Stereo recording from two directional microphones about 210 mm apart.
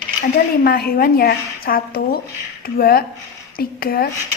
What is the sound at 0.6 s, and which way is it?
A woman's voice, 45° left (ahead or behind).